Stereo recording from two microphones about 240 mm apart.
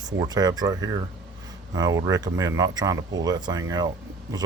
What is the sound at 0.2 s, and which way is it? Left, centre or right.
Speech, centre.